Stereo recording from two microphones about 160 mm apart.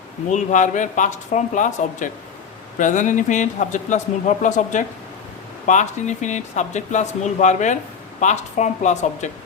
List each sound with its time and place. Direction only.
0.3 s speech: 50° left (ahead or behind)